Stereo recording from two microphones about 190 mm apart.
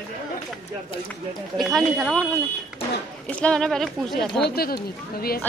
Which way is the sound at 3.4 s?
5° left (ahead or behind).